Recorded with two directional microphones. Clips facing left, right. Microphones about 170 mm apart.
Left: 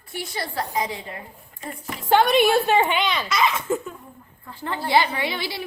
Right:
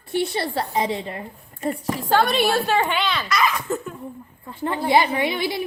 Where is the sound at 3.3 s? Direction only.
25° left (ahead or behind).